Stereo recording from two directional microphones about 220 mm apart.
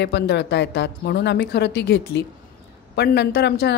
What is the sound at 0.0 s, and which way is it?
A woman's voice, 50° left (ahead or behind).